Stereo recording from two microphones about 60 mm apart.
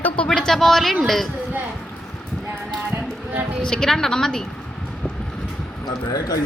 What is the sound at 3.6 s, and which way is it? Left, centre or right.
Speech, centre.